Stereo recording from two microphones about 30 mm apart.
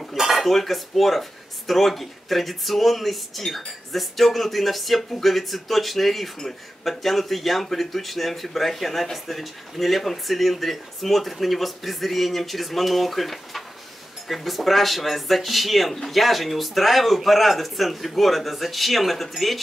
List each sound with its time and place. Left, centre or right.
0.1 s cutlery: centre
0.5 s speech: centre